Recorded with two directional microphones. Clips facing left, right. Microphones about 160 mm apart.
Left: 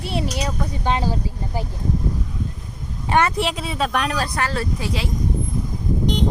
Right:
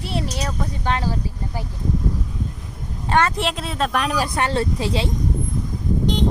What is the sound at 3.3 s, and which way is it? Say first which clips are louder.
Speech: left 1 dB; centre (ahead or behind).